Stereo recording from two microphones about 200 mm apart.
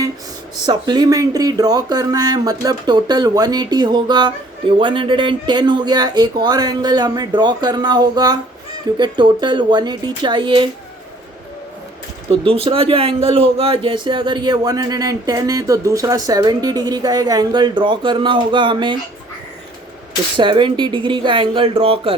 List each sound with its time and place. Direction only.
0.6 s speech: 20° right (ahead or behind)
12.3 s speech: 30° right (ahead or behind)
20.3 s speech: 25° right (ahead or behind)